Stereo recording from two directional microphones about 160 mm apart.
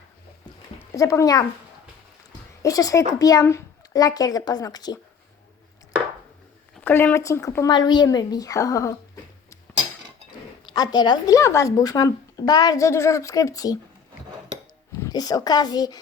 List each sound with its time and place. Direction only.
0.9 s speech: 20° left (ahead or behind)
2.6 s speech: 20° left (ahead or behind)
6.8 s speech: 15° left (ahead or behind)
10.8 s speech: 25° left (ahead or behind)
15.0 s speech: 25° left (ahead or behind)